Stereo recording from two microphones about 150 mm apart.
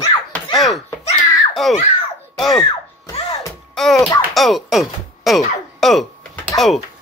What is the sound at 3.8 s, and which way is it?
Speech, centre (ahead or behind).